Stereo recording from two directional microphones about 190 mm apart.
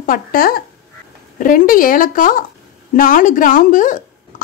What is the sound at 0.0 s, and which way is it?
Speech, 45° left (ahead or behind).